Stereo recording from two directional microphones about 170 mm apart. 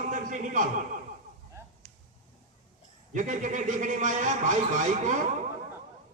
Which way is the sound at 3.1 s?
50° right (ahead or behind).